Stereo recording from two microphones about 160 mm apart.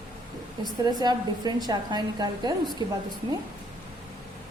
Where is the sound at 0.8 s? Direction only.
25° right (ahead or behind).